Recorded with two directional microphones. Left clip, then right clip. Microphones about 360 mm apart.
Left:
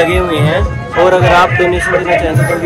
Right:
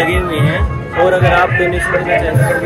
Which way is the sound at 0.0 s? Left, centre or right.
Centre.